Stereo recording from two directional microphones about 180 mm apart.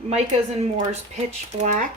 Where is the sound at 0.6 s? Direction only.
35° right (ahead or behind).